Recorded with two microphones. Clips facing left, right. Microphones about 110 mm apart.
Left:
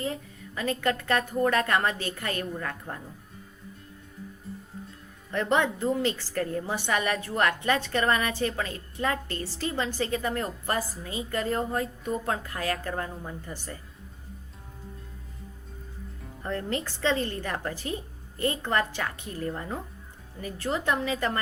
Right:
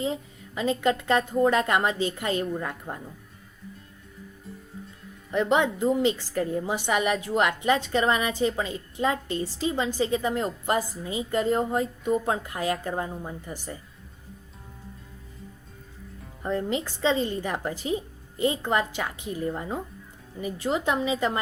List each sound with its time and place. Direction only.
0.0 s a woman's voice: 20° right (ahead or behind)
5.3 s a woman's voice: 15° right (ahead or behind)
16.4 s a woman's voice: 15° right (ahead or behind)